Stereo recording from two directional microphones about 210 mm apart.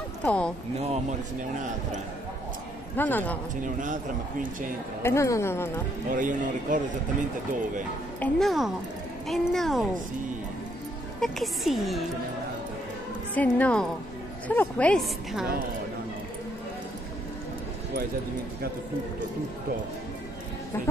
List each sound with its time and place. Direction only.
0.2 s speech: 5° left (ahead or behind)
0.7 s speech: 30° right (ahead or behind)
3.0 s speech: 10° left (ahead or behind)
3.6 s speech: 40° right (ahead or behind)
5.0 s speech: 15° left (ahead or behind)
6.0 s speech: 40° right (ahead or behind)
8.2 s a woman's voice: centre (ahead or behind)
11.1 s a woman's voice: centre (ahead or behind)
13.3 s a woman's voice: 5° left (ahead or behind)
20.7 s speech: 10° left (ahead or behind)